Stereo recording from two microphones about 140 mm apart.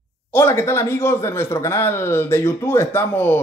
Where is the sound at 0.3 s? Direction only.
15° left (ahead or behind).